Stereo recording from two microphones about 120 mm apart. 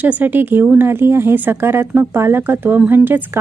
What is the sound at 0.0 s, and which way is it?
Speech, 15° right (ahead or behind).